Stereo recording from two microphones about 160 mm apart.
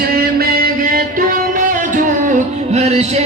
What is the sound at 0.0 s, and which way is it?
Music, 70° right (ahead or behind).